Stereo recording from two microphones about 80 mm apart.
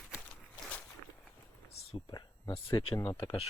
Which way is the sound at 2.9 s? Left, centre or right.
Left.